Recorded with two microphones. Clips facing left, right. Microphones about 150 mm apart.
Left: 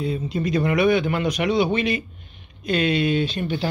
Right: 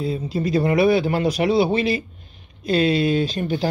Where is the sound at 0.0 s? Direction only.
35° right (ahead or behind).